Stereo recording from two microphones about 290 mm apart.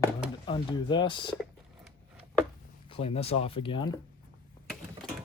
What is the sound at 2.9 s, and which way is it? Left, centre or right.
Speech, centre.